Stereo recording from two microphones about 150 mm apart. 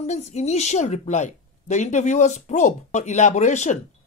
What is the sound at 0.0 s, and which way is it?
A woman's voice, 50° left (ahead or behind).